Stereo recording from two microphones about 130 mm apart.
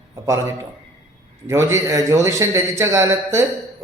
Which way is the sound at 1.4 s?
20° right (ahead or behind).